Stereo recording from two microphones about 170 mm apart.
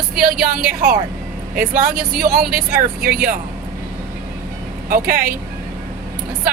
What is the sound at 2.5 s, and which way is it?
Speech, 60° right (ahead or behind).